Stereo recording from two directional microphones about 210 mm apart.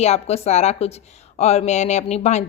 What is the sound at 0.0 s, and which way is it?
Speech, 30° left (ahead or behind).